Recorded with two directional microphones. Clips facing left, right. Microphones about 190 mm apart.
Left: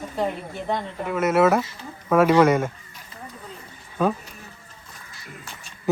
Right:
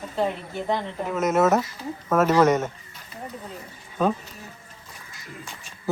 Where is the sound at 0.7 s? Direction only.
5° left (ahead or behind).